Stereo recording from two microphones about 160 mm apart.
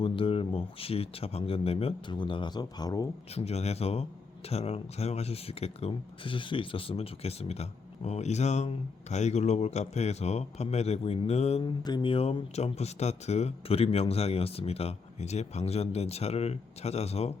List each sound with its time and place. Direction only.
0.0 s speech: 35° left (ahead or behind)
3.3 s speech: 40° left (ahead or behind)
11.8 s speech: 30° left (ahead or behind)